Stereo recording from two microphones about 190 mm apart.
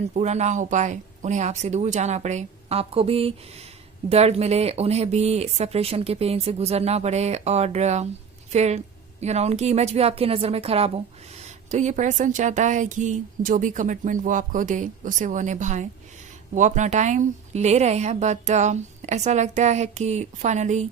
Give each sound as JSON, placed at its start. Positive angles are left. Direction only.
{"t": 0.1, "sound": "a woman's voice", "side_deg": -35}